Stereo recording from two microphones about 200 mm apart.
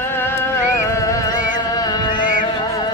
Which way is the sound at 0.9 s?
15° left (ahead or behind).